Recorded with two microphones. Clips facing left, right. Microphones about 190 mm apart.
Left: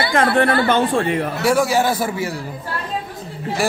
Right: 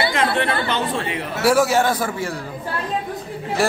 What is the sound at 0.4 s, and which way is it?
Speech, 50° left (ahead or behind).